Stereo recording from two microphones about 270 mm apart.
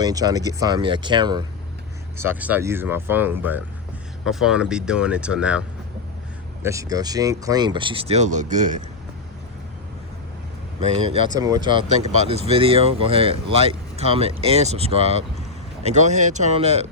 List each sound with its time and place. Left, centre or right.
0.0 s speech: centre
11.3 s speech: centre